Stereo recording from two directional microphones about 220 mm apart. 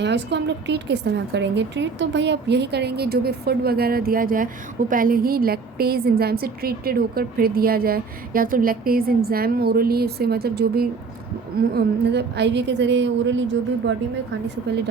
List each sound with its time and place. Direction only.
0.0 s a woman's voice: 50° right (ahead or behind)